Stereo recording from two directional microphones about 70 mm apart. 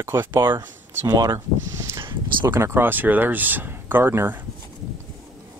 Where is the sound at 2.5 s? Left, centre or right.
Right.